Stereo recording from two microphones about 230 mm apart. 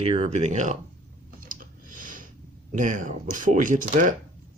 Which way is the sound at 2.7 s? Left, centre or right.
Right.